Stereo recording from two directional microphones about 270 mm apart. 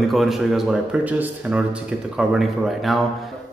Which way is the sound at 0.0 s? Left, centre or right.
Centre.